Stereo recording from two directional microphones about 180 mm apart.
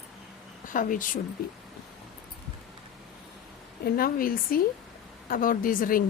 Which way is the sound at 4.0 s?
55° left (ahead or behind).